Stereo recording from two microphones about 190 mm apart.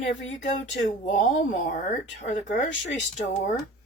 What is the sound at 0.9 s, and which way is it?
A woman's voice, 40° left (ahead or behind).